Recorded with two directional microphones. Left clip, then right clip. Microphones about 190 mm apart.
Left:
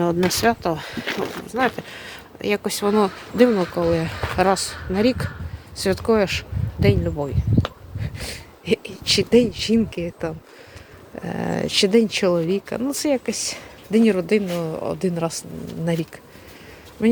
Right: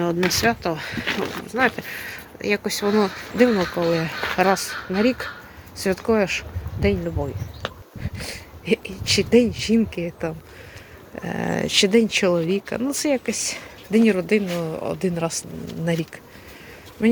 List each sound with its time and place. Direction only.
0.3 s speech: 25° left (ahead or behind)
1.5 s speech: 10° left (ahead or behind)
3.5 s speech: centre (ahead or behind)
3.9 s speech: 10° left (ahead or behind)